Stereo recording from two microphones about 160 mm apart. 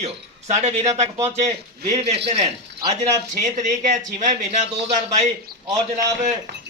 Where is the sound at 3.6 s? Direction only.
50° right (ahead or behind).